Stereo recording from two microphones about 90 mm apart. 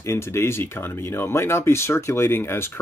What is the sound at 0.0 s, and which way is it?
Speech, 30° left (ahead or behind).